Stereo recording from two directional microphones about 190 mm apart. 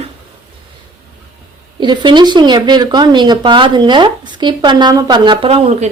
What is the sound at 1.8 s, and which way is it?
A woman's voice, 25° right (ahead or behind).